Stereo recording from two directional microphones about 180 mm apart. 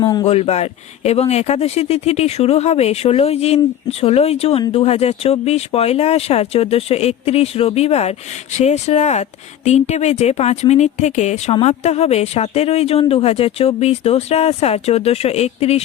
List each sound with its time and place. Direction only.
0.0 s speech: 25° left (ahead or behind)
0.3 s speech: 35° left (ahead or behind)